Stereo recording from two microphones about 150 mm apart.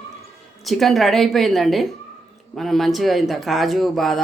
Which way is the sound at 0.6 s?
Centre (ahead or behind).